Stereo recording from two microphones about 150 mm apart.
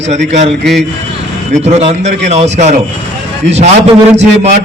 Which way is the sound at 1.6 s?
45° right (ahead or behind).